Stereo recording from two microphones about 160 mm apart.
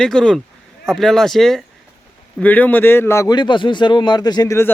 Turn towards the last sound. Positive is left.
turn(degrees=20)  # may be behind; listen again after turning